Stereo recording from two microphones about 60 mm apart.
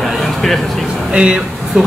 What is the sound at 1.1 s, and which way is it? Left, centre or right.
Speech, centre.